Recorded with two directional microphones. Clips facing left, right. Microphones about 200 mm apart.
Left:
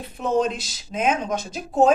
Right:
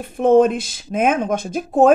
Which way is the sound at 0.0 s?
55° right (ahead or behind).